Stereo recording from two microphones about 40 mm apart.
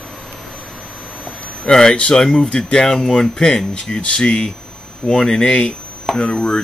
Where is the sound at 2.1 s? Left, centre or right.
Centre.